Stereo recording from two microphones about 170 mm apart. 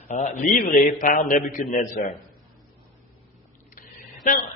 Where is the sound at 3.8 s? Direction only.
50° left (ahead or behind).